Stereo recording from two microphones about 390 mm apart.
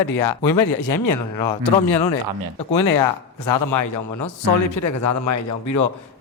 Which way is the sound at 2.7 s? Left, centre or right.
Left.